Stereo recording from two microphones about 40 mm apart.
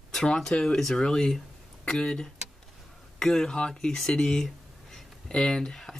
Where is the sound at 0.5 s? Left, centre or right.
Left.